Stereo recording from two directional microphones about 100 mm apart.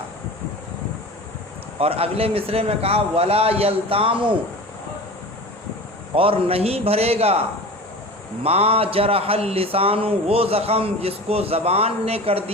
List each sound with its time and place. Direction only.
1.8 s a man's voice: 75° right (ahead or behind)
6.1 s a man's voice: 65° right (ahead or behind); by 7.4 s 90° right
8.4 s a man's voice: 85° right